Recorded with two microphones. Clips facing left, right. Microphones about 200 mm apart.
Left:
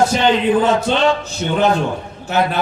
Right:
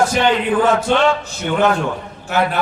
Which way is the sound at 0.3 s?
20° left (ahead or behind).